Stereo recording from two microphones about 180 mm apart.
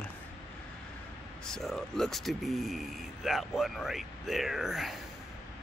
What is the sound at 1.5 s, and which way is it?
Speech, centre (ahead or behind).